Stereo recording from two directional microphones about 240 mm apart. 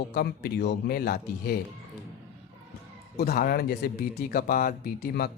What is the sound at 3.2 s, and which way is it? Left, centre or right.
Speech, left.